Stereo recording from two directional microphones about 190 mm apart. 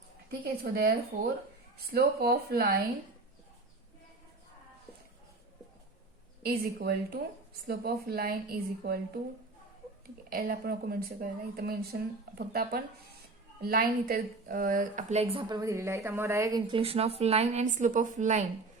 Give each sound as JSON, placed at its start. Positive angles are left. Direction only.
{"t": 0.3, "sound": "speech", "side_deg": -50}
{"t": 6.4, "sound": "speech", "side_deg": -50}
{"t": 10.2, "sound": "speech", "side_deg": -55}
{"t": 13.6, "sound": "a woman's voice", "side_deg": -50}